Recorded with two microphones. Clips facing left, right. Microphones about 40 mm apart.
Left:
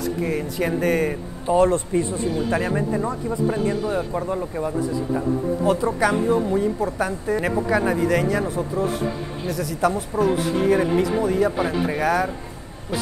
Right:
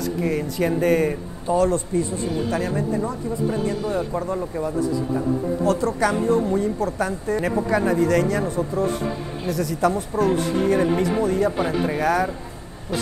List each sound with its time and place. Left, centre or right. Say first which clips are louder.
0.2 s speech: right 3 dB; centre
1.5 s speech: left 2 dB; left
3.8 s a woman's voice: even; centre